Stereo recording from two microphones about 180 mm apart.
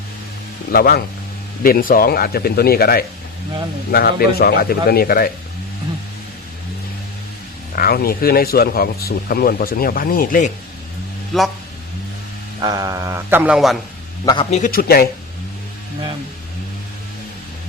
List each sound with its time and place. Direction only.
0.7 s speech: 55° left (ahead or behind)
7.8 s speech: 55° left (ahead or behind)
11.3 s speech: centre (ahead or behind)
12.6 s a man's voice: 20° right (ahead or behind); by 13.8 s centre (ahead or behind)
14.5 s speech: 50° left (ahead or behind)